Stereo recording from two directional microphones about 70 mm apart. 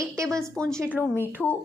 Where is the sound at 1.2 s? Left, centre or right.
Left.